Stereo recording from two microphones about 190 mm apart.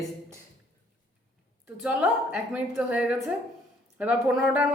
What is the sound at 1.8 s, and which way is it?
Speech, 5° right (ahead or behind).